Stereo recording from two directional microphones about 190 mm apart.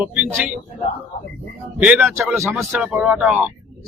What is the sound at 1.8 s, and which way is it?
A man's voice, 5° right (ahead or behind).